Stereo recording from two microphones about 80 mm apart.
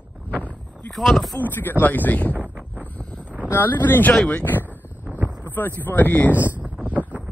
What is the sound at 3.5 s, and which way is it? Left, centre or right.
Speech, left.